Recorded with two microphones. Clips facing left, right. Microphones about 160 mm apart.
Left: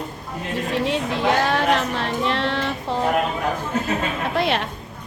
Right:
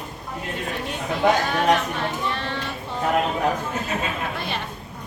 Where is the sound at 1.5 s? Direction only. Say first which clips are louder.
Left 1 dB; 70° left (ahead or behind).